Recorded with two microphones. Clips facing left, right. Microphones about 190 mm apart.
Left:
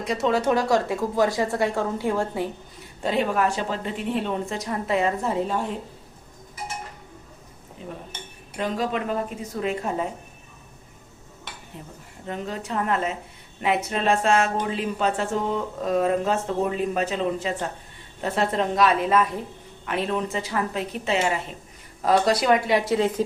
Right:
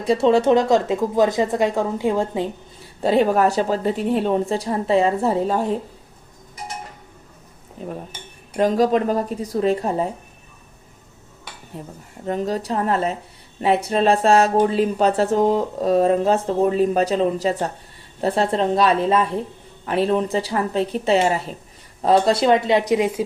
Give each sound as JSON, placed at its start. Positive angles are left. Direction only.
{"t": 0.0, "sound": "speech", "side_deg": -30}
{"t": 3.0, "sound": "speech", "side_deg": -35}
{"t": 7.8, "sound": "dishes", "side_deg": -45}
{"t": 8.5, "sound": "speech", "side_deg": -40}
{"t": 11.7, "sound": "speech", "side_deg": -40}